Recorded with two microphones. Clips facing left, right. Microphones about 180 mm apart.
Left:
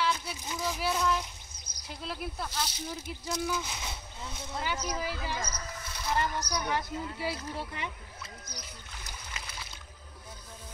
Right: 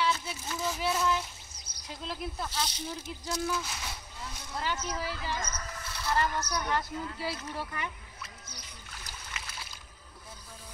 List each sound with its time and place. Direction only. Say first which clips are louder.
0.1 s a sound: right 1 dB; 15° left (ahead or behind)
0.7 s speech: even; centre (ahead or behind)
1.7 s bird: even; 40° left (ahead or behind)
2.0 s speech: even; 10° left (ahead or behind)
3.4 s speech: even; 20° left (ahead or behind)
9.3 s a sound: even; 35° left (ahead or behind)